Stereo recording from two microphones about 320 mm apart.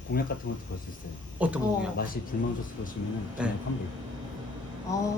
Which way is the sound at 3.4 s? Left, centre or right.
Centre.